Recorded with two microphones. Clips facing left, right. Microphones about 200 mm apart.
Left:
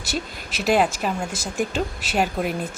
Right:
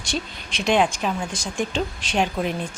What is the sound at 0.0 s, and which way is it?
A woman's voice, 5° left (ahead or behind).